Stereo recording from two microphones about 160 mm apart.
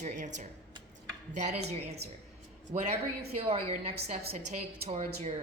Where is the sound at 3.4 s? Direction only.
35° right (ahead or behind).